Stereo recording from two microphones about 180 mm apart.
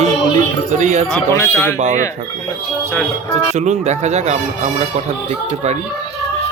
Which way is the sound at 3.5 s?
40° right (ahead or behind).